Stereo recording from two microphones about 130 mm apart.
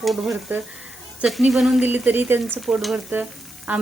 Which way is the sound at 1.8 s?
15° right (ahead or behind).